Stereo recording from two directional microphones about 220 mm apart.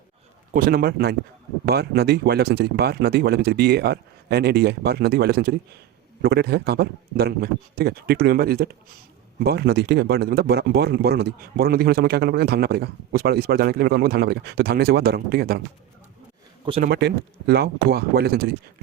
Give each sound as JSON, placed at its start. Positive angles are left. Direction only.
{"t": 0.5, "sound": "a man's voice", "side_deg": -40}
{"t": 16.8, "sound": "a man's voice", "side_deg": -50}